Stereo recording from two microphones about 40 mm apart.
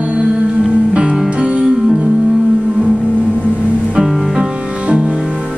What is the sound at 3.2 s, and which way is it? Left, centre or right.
Vehicle, right.